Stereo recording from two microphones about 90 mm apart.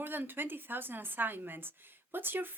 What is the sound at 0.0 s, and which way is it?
A woman's voice, 25° right (ahead or behind).